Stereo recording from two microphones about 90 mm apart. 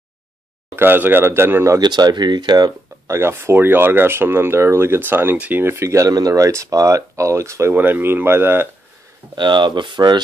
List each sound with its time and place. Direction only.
0.7 s speech: 25° right (ahead or behind)
1.8 s speech: 50° right (ahead or behind)
3.1 s speech: 30° right (ahead or behind)
7.7 s speech: 20° right (ahead or behind)
9.3 s speech: 60° right (ahead or behind)